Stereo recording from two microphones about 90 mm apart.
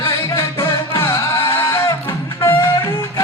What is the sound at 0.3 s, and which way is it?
Music, 30° left (ahead or behind).